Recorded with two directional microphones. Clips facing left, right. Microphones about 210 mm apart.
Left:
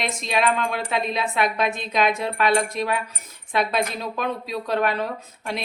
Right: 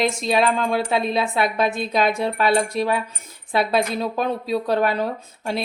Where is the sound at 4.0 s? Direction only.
30° right (ahead or behind).